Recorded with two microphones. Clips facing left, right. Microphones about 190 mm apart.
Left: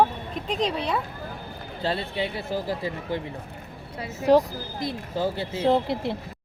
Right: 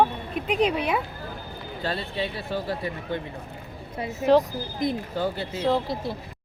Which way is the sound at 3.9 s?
20° right (ahead or behind).